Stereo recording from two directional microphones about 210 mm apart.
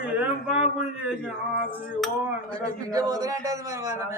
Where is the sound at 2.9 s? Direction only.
15° right (ahead or behind).